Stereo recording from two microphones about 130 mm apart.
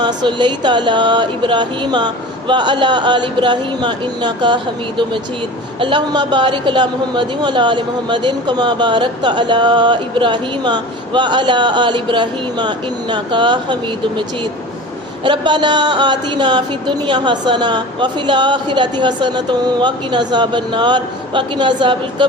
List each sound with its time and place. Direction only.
0.0 s a man's voice: 35° right (ahead or behind)
15.2 s a man's voice: 35° right (ahead or behind)